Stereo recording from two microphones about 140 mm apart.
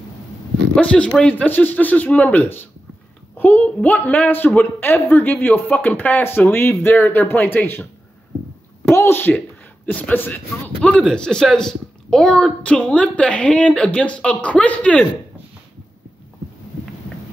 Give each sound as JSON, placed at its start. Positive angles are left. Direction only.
{"t": 0.7, "sound": "speech", "side_deg": 10}